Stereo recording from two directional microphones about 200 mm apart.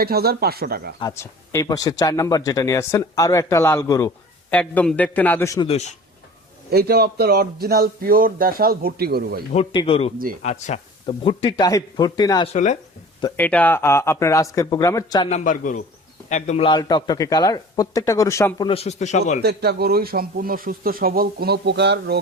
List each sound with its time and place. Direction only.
0.0 s speech: 50° right (ahead or behind)
0.9 s speech: 15° left (ahead or behind)
5.6 s speech: 35° left (ahead or behind)
6.7 s speech: 50° right (ahead or behind)
9.7 s speech: 30° left (ahead or behind)
13.3 s speech: 10° left (ahead or behind)
15.3 s speech: 40° left (ahead or behind); by 18.7 s 15° left (ahead or behind)
18.7 s speech: 30° left (ahead or behind)
19.4 s speech: 55° right (ahead or behind)